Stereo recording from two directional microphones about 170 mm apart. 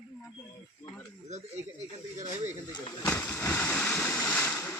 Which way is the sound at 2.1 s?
45° right (ahead or behind).